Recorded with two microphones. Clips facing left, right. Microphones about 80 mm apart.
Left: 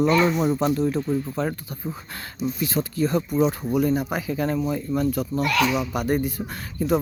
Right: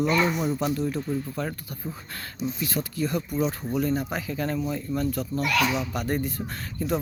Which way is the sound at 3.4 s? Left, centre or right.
Centre.